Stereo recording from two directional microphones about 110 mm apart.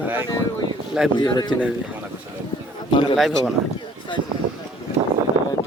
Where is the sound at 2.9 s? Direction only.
50° left (ahead or behind).